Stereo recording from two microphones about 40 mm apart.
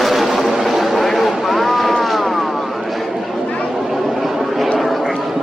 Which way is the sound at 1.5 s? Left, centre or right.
Centre.